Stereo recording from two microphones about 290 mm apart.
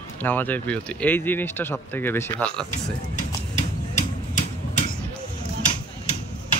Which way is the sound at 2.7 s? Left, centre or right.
Left.